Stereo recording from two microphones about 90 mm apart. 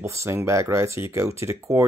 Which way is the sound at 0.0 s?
30° right (ahead or behind).